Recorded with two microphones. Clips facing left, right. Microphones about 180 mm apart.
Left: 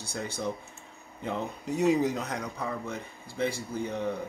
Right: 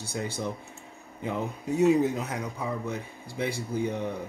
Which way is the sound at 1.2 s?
5° right (ahead or behind).